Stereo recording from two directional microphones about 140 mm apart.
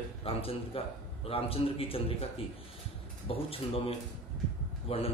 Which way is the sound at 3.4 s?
40° left (ahead or behind).